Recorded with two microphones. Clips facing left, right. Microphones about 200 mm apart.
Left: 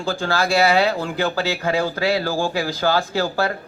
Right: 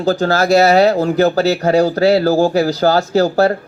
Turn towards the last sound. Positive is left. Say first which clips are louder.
# right 9 dB
turn(degrees=-40)  # may be behind; listen again after turning